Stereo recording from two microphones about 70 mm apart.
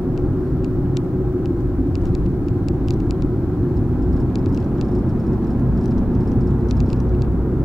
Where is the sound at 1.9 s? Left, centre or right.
Centre.